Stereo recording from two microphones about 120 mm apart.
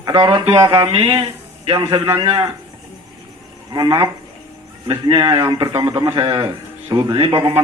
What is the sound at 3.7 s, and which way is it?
A man's voice, 35° right (ahead or behind).